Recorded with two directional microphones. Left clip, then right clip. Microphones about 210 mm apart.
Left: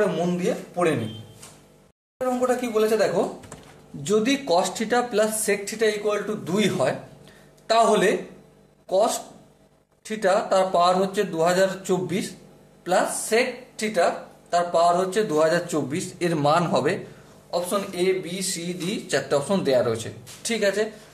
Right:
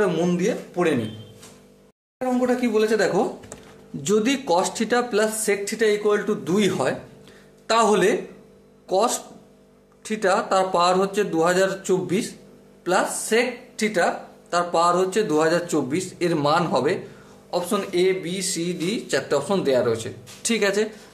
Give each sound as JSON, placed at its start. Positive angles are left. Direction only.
{"t": 0.0, "sound": "speech", "side_deg": -30}
{"t": 2.4, "sound": "speech", "side_deg": -45}
{"t": 4.0, "sound": "speech", "side_deg": -30}
{"t": 5.7, "sound": "a man's voice", "side_deg": -35}
{"t": 17.5, "sound": "speech", "side_deg": -35}
{"t": 18.9, "sound": "speech", "side_deg": -15}
{"t": 20.4, "sound": "speech", "side_deg": -35}